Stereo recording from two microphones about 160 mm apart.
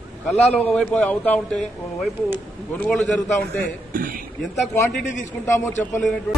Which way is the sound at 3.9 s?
60° right (ahead or behind).